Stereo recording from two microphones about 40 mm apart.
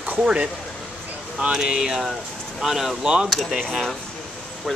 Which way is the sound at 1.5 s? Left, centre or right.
Right.